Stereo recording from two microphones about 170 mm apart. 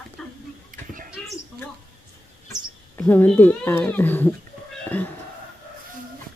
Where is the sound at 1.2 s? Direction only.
5° left (ahead or behind).